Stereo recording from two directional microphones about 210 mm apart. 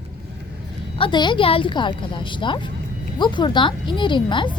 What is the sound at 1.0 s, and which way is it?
A woman's voice, 25° left (ahead or behind).